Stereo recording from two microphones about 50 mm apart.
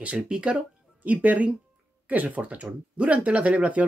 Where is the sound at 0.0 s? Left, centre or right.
Right.